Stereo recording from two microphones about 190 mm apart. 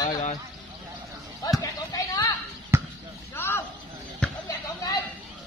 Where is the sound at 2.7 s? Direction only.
15° right (ahead or behind).